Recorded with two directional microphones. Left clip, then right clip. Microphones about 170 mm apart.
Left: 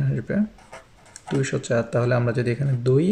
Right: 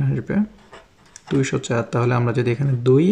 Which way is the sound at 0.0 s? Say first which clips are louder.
Right 2 dB; 35° right (ahead or behind).